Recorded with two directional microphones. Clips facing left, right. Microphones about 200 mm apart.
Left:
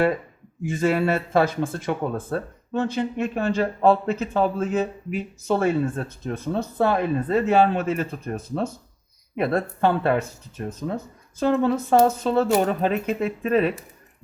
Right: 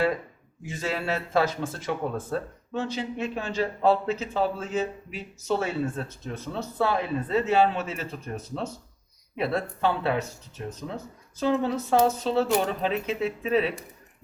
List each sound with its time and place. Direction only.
0.6 s speech: 50° left (ahead or behind)